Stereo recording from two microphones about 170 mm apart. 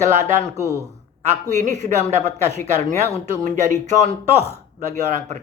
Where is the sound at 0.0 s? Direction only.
45° right (ahead or behind).